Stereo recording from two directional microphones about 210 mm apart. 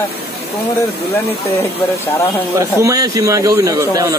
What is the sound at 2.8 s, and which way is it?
Speech, 15° right (ahead or behind).